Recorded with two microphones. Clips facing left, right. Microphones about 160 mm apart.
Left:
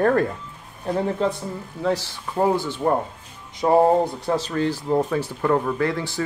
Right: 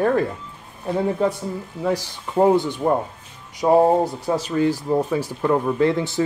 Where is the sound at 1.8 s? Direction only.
15° right (ahead or behind).